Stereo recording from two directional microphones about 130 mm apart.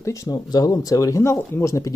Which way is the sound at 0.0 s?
25° left (ahead or behind).